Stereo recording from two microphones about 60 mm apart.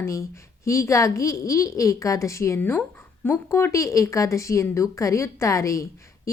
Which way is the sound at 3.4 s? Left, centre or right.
Left.